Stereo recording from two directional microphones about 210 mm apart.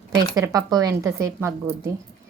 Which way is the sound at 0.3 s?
15° right (ahead or behind).